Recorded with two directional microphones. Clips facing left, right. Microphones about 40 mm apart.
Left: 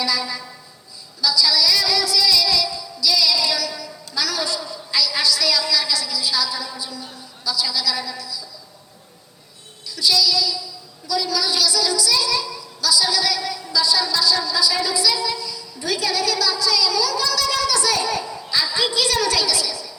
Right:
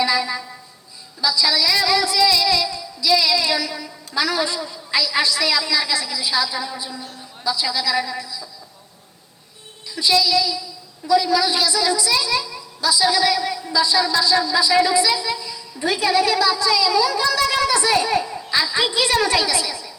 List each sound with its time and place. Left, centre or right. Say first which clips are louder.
0.0 s a sound: right 4 dB; right
7.4 s a woman's voice: right 2 dB; right
9.8 s a woman's voice: right 1 dB; right